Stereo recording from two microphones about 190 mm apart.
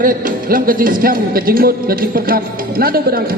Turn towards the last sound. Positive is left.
turn(degrees=-50)  # may be behind; listen again after turning